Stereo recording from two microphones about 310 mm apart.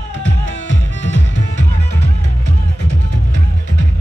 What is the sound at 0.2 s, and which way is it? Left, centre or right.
Music, left.